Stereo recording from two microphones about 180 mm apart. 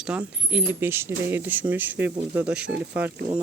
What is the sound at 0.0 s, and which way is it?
Speech, 5° right (ahead or behind).